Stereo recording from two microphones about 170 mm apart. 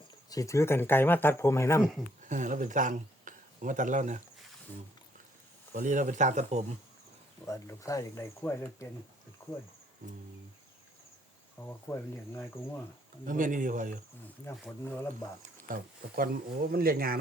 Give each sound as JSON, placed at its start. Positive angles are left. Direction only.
{"t": 0.3, "sound": "speech", "side_deg": 20}
{"t": 2.3, "sound": "speech", "side_deg": -45}
{"t": 5.7, "sound": "speech", "side_deg": -50}
{"t": 7.4, "sound": "speech", "side_deg": 20}
{"t": 11.9, "sound": "speech", "side_deg": 15}
{"t": 13.2, "sound": "speech", "side_deg": -50}
{"t": 15.6, "sound": "speech", "side_deg": -55}